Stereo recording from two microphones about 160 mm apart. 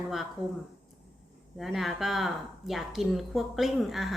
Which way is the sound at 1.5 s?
Centre (ahead or behind).